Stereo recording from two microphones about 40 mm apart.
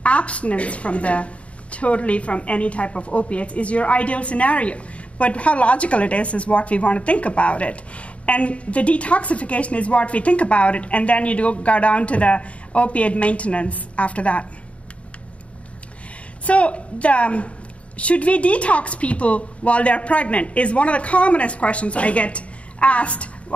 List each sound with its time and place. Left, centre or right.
0.0 s a woman's voice: left
16.4 s a woman's voice: left